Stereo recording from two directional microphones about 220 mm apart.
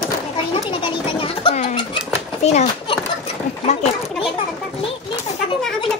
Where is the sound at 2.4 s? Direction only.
30° left (ahead or behind).